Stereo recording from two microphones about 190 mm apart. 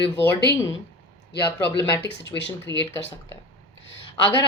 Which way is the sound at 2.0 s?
65° left (ahead or behind).